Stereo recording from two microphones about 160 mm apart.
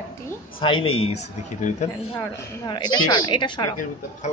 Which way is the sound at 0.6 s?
35° left (ahead or behind).